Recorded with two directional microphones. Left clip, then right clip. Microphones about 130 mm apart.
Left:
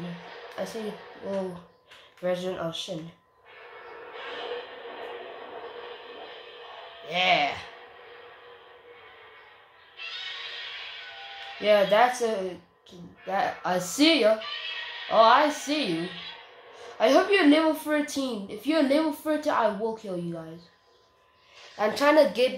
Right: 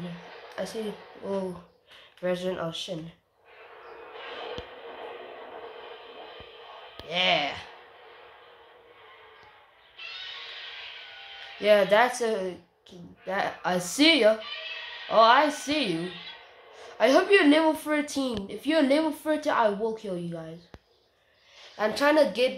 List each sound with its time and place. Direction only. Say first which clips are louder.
0.6 s a sound: even; 35° right (ahead or behind)
2.2 s speech: even; 40° right (ahead or behind)
7.1 s a woman's voice: left 2 dB; 25° right (ahead or behind)
11.6 s speech: even; 40° right (ahead or behind)
21.7 s a woman's voice: left 2 dB; 25° right (ahead or behind)